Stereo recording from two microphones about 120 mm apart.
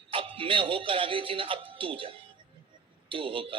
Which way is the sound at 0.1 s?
45° right (ahead or behind).